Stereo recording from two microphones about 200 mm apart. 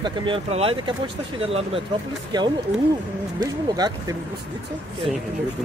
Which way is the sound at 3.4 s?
20° right (ahead or behind).